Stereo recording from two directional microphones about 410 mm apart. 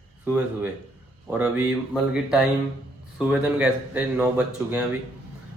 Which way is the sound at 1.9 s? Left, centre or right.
Centre.